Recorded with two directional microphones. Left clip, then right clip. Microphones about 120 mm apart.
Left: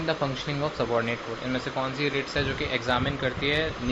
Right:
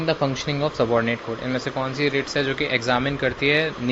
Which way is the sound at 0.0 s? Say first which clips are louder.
Right 5 dB; 75° right (ahead or behind).